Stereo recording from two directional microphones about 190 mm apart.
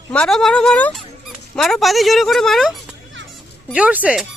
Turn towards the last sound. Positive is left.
turn(degrees=-5)  # may be behind; listen again after turning